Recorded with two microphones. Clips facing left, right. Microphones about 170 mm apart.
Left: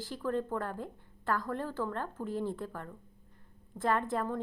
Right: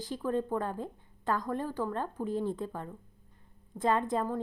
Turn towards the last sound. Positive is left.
turn(degrees=-15)  # may be behind; listen again after turning